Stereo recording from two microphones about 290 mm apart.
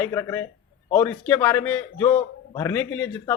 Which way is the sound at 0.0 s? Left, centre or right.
Centre.